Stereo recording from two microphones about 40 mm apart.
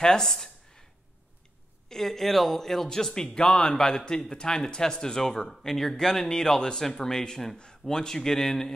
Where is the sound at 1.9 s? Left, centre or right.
Centre.